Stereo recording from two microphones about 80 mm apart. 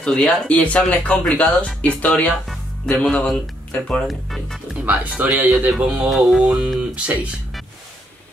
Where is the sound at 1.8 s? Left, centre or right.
Centre.